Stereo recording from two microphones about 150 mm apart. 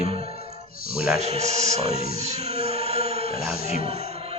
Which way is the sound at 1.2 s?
45° right (ahead or behind).